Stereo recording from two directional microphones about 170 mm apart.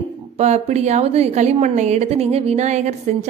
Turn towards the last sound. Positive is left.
turn(degrees=-45)  # may be behind; listen again after turning